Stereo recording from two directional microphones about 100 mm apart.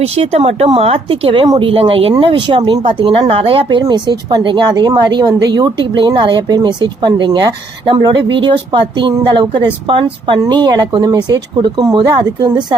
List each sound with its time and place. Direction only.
0.0 s speech: 90° right; by 2.1 s 70° right (ahead or behind)
2.2 s speech: 60° right (ahead or behind)
10.4 s speech: 45° right (ahead or behind)